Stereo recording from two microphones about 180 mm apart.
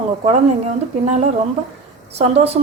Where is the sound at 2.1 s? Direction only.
35° right (ahead or behind).